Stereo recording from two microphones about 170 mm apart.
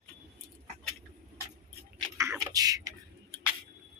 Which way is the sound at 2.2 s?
20° right (ahead or behind).